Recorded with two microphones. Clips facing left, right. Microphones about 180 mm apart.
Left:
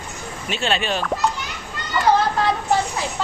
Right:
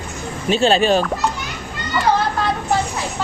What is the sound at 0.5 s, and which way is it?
Speech, 35° right (ahead or behind).